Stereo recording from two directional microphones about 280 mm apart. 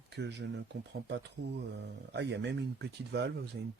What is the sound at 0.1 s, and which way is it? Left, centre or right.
Speech, right.